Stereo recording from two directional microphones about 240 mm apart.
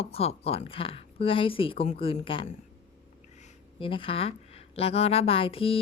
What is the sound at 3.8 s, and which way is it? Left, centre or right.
A woman's voice, left.